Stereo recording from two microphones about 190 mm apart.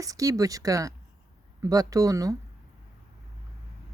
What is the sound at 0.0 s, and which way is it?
Speech, 15° right (ahead or behind).